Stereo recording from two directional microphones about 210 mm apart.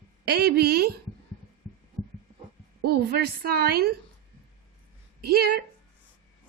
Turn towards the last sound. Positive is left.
turn(degrees=-45)  # may be behind; listen again after turning